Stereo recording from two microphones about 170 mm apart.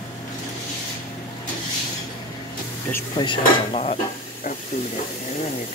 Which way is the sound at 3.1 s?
30° left (ahead or behind).